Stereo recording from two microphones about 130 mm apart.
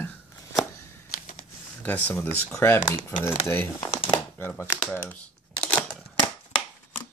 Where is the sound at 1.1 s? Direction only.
90° left.